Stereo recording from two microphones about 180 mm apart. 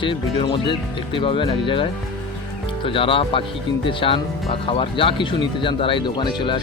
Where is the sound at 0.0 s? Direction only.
30° left (ahead or behind).